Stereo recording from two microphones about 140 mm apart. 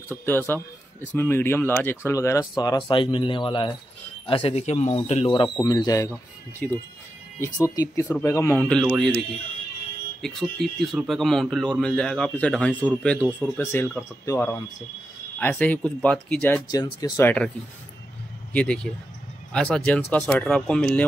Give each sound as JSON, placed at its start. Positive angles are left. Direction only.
{"t": 0.1, "sound": "speech", "side_deg": 15}
{"t": 5.3, "sound": "speech", "side_deg": 30}
{"t": 6.6, "sound": "speech", "side_deg": 10}
{"t": 7.3, "sound": "speech", "side_deg": 20}
{"t": 8.5, "sound": "speech", "side_deg": 5}
{"t": 10.2, "sound": "speech", "side_deg": 0}
{"t": 16.7, "sound": "speech", "side_deg": 25}
{"t": 17.2, "sound": "speech", "side_deg": 10}
{"t": 18.5, "sound": "speech", "side_deg": 10}